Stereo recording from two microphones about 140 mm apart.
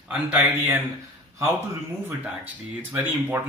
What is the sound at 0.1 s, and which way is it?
Speech, 10° right (ahead or behind).